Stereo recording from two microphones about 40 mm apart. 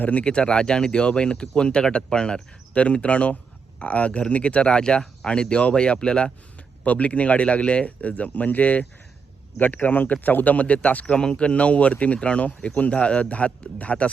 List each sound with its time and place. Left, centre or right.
0.0 s speech: left
0.3 s speech: left
6.8 s speech: left
11.0 s speech: left